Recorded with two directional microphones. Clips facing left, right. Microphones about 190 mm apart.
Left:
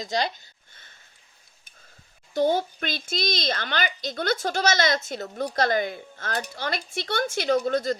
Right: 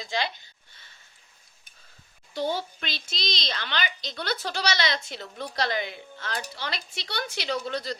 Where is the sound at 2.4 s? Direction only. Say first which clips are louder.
Left 6 dB; 50° left (ahead or behind).